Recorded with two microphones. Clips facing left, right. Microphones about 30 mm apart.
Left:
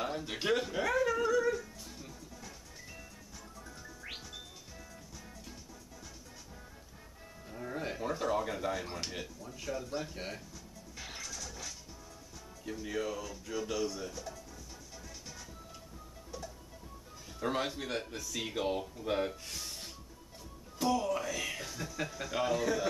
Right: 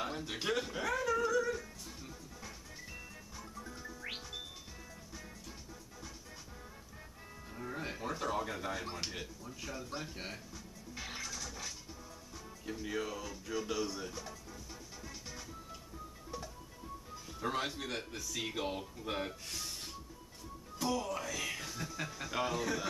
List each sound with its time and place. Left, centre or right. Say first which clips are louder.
0.0 s a sound: left 3 dB; centre
7.4 s music: left 3 dB; centre
9.9 s speech: left 4 dB; centre
11.0 s music: right 1 dB; centre
12.6 s speech: left 2 dB; centre
15.0 s music: right 1 dB; centre
17.4 s speech: left 3 dB; centre